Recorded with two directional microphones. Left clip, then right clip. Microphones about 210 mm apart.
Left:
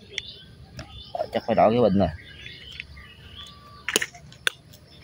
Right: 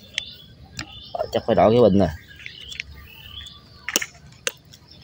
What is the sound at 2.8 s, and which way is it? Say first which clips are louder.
Bird vocalization: right 6 dB; 40° right (ahead or behind).